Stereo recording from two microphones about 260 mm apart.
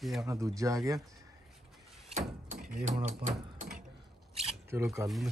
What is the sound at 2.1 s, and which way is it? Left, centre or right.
Speech, right.